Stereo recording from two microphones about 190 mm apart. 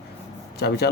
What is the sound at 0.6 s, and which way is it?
Speech, 60° left (ahead or behind).